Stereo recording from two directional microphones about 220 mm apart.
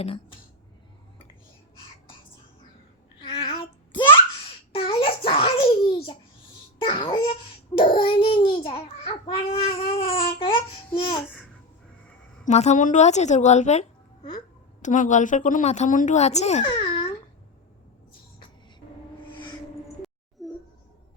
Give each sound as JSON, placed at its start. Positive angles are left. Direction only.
{"t": 0.0, "sound": "speech", "side_deg": 25}
{"t": 3.3, "sound": "babbling", "side_deg": 25}
{"t": 4.7, "sound": "a sound", "side_deg": 25}
{"t": 6.8, "sound": "babbling", "side_deg": 20}
{"t": 7.8, "sound": "child singing", "side_deg": 20}
{"t": 8.6, "sound": "babbling", "side_deg": 25}
{"t": 12.5, "sound": "a woman's voice", "side_deg": 30}
{"t": 20.4, "sound": "a sound", "side_deg": 0}